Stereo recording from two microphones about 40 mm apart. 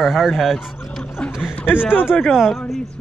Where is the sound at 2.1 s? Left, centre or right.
Centre.